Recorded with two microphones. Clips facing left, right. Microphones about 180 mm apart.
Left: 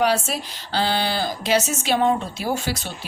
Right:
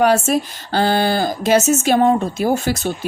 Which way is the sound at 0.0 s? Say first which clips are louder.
Right 6 dB; 50° right (ahead or behind).